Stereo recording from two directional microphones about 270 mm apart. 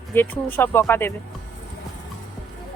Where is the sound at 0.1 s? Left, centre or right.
Centre.